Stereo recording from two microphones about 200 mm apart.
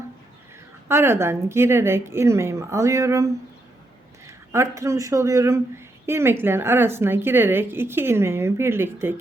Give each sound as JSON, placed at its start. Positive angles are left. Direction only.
{"t": 0.9, "sound": "speech", "side_deg": -10}